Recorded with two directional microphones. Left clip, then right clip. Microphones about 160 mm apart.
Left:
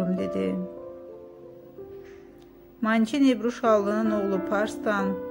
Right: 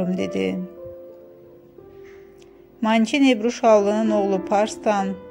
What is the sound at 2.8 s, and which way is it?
A woman's voice, 15° right (ahead or behind).